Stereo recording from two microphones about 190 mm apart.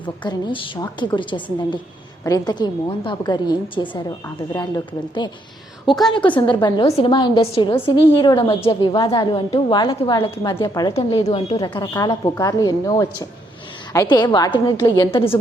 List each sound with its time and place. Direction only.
0.0 s a woman's voice: 25° left (ahead or behind)
10.6 s a woman's voice: 15° left (ahead or behind)
15.1 s a woman's voice: 30° left (ahead or behind)